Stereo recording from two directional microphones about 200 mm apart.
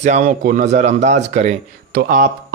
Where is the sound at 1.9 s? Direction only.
45° right (ahead or behind).